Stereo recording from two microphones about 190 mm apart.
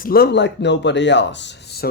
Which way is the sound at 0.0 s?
55° left (ahead or behind).